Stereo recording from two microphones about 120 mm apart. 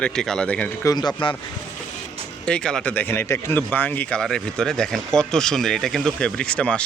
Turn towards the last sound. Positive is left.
turn(degrees=10)  # may be behind; listen again after turning